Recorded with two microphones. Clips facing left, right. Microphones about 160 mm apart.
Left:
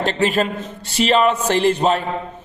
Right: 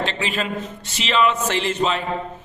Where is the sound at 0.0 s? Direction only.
45° left (ahead or behind).